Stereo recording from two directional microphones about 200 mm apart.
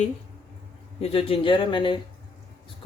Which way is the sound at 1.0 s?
30° left (ahead or behind).